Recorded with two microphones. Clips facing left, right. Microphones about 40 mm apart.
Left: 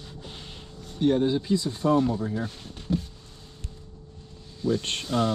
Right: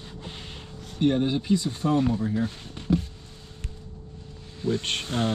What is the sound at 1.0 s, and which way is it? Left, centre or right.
Speech, right.